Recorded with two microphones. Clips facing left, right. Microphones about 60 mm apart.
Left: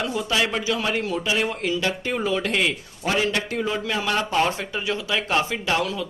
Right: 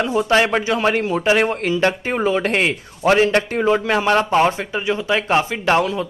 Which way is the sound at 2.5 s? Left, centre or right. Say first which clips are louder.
Right 4 dB; right.